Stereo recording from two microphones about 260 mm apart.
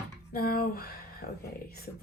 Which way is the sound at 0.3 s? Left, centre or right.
Left.